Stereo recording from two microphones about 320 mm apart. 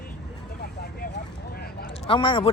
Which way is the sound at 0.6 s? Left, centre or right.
Left.